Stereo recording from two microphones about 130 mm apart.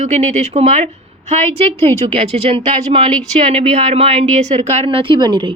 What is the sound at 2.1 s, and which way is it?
A woman's voice, 45° right (ahead or behind).